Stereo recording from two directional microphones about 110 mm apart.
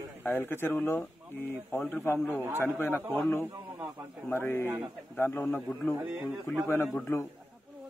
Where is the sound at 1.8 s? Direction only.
15° left (ahead or behind).